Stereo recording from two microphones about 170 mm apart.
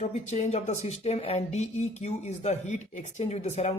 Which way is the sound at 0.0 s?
40° left (ahead or behind).